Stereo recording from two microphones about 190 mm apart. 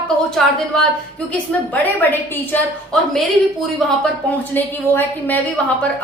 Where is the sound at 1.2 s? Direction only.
10° left (ahead or behind).